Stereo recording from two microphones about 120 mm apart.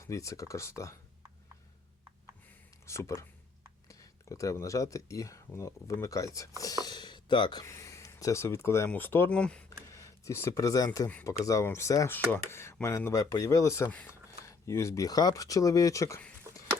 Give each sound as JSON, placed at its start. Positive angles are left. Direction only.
{"t": 0.0, "sound": "speech", "side_deg": 25}
{"t": 2.5, "sound": "a sound", "side_deg": 25}
{"t": 3.8, "sound": "speech", "side_deg": 30}
{"t": 6.8, "sound": "a sound", "side_deg": 35}
{"t": 8.9, "sound": "speech", "side_deg": 15}
{"t": 9.9, "sound": "speech", "side_deg": 25}
{"t": 13.9, "sound": "speech", "side_deg": 10}
{"t": 14.4, "sound": "speech", "side_deg": 25}